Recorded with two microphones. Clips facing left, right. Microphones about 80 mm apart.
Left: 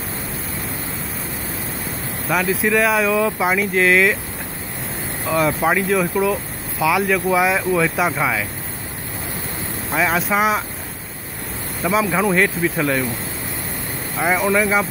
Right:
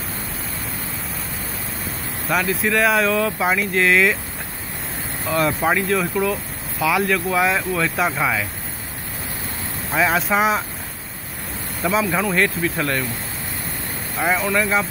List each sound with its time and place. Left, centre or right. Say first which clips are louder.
2.2 s speech: left 2 dB; centre
5.2 s speech: left 2 dB; centre
9.9 s speech: even; centre
11.8 s speech: left 2 dB; centre
14.1 s speech: left 2 dB; centre